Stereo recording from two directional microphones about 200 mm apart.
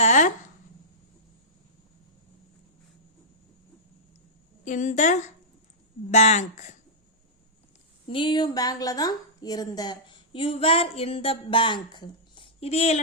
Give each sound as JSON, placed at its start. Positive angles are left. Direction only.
{"t": 0.0, "sound": "a sound", "side_deg": 35}
{"t": 4.6, "sound": "speech", "side_deg": 40}
{"t": 8.0, "sound": "a woman's voice", "side_deg": 25}